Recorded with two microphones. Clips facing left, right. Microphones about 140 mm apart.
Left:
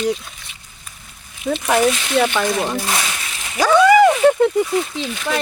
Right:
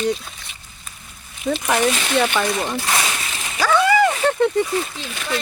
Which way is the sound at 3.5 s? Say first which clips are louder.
Left 5 dB; 15° left (ahead or behind).